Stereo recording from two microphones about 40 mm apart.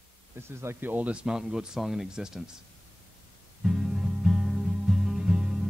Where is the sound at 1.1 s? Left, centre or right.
Right.